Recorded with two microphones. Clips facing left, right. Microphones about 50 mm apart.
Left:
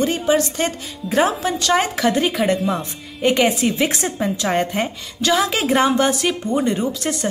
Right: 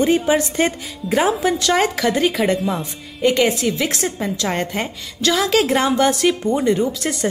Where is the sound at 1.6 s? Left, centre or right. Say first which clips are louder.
Left 2 dB; centre.